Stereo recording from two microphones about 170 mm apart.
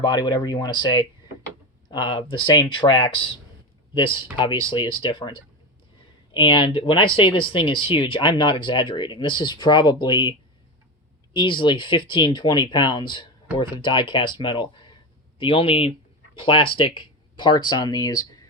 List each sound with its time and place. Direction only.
0.0 s speech: 25° left (ahead or behind)
6.3 s speech: 30° left (ahead or behind)
11.3 s speech: 30° left (ahead or behind)